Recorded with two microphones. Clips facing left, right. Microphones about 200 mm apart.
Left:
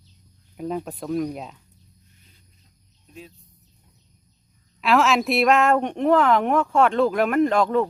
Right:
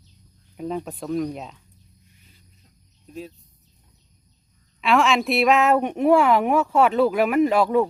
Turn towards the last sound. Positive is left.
turn(degrees=-10)  # may be behind; listen again after turning